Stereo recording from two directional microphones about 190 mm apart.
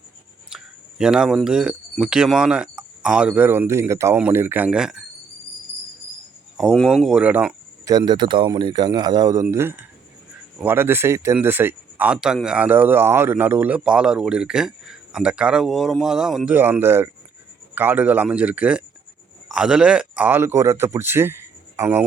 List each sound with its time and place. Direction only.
0.5 s speech: 5° right (ahead or behind)
6.6 s speech: centre (ahead or behind)
7.9 s speech: 20° right (ahead or behind)